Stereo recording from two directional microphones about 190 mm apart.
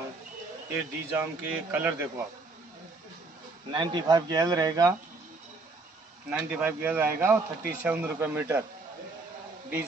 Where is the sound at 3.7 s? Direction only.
20° right (ahead or behind).